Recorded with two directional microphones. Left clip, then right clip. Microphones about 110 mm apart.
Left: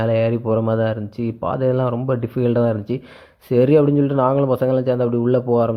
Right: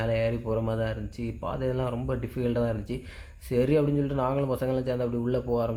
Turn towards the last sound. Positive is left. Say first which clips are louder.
# left 11 dB
turn(degrees=50)  # may be behind; listen again after turning